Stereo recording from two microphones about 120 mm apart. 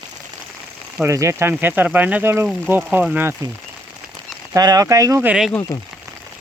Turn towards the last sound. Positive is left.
turn(degrees=-5)  # may be behind; listen again after turning